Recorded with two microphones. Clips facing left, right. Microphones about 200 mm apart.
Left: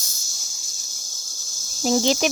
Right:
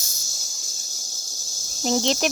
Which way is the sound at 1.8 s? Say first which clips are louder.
Left 2 dB; 5° left (ahead or behind).